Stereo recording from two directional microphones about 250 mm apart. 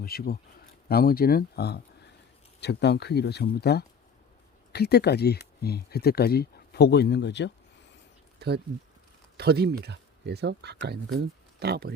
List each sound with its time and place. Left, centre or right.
0.0 s speech: left
8.4 s speech: right